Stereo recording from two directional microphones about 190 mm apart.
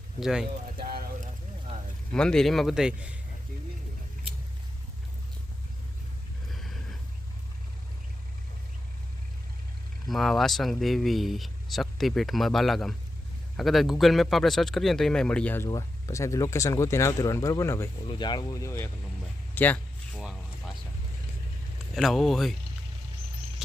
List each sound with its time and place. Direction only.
0.2 s speech: centre (ahead or behind)
0.8 s boat: 50° right (ahead or behind)
2.1 s speech: 5° left (ahead or behind)
6.5 s a sound: centre (ahead or behind)
10.1 s speech: centre (ahead or behind)
19.5 s a sound: 10° left (ahead or behind)
21.9 s speech: centre (ahead or behind)